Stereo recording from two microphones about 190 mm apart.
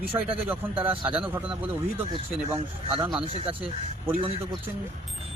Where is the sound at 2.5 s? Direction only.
30° right (ahead or behind).